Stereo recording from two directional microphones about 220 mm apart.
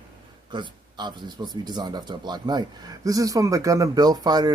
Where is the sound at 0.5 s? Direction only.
20° right (ahead or behind).